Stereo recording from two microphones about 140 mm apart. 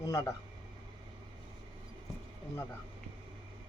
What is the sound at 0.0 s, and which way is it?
Speech, 25° left (ahead or behind).